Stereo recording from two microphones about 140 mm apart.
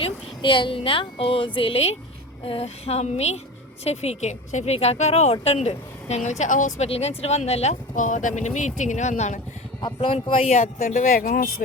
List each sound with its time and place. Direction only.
0.0 s a woman's voice: 35° left (ahead or behind); by 6.3 s 50° left (ahead or behind)
6.4 s speech: 65° left (ahead or behind)
6.7 s speech: 45° left (ahead or behind)
9.8 s speech: 35° left (ahead or behind)
10.6 s speech: 65° left (ahead or behind); by 11.6 s 85° left